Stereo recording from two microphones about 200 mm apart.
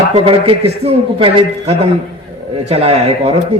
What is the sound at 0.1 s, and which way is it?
A man's voice, 25° right (ahead or behind).